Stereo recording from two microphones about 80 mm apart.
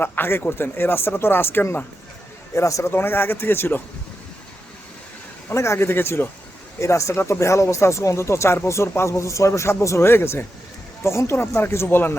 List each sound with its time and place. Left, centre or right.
0.0 s speech: left
2.6 s speech: left
2.9 s speech: left
5.5 s speech: left